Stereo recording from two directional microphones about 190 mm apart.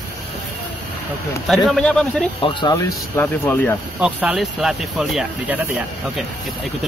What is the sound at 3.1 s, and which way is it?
Speech, 10° left (ahead or behind).